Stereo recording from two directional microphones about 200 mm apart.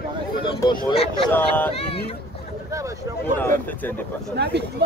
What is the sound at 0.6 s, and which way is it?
Speech, 20° left (ahead or behind).